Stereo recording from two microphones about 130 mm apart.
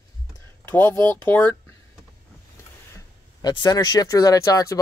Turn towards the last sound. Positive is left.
turn(degrees=25)  # may be behind; listen again after turning